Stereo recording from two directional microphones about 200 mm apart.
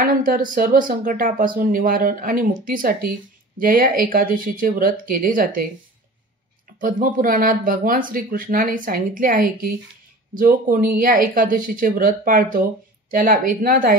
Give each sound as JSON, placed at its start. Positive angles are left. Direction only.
{"t": 0.0, "sound": "speech", "side_deg": -45}
{"t": 6.8, "sound": "speech", "side_deg": -40}